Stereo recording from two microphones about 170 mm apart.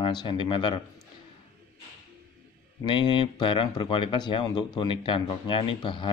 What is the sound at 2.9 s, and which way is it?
Speech, 30° left (ahead or behind).